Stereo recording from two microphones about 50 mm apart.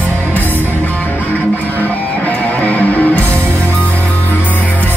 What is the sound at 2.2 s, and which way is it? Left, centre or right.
Music, left.